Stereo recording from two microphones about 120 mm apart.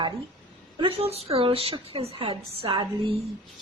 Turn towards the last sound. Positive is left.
turn(degrees=-50)  # may be behind; listen again after turning